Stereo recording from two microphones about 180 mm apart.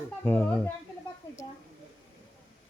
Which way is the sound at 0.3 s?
10° left (ahead or behind).